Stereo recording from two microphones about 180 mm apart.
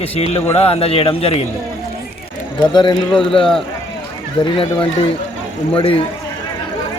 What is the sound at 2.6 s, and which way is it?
Speech, 25° left (ahead or behind).